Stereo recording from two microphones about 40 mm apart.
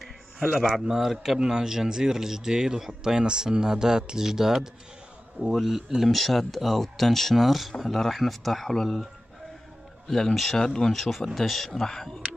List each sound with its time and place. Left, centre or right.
0.8 s speech: centre
6.0 s speech: centre
10.6 s speech: centre
10.9 s speech: centre
11.8 s speech: centre